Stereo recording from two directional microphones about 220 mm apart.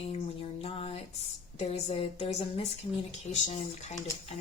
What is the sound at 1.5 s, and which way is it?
Speech, 30° left (ahead or behind).